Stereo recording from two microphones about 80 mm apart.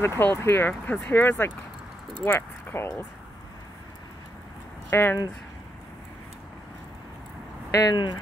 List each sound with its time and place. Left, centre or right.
0.0 s speech: left
2.6 s a sound: left
4.9 s speech: left
7.7 s speech: left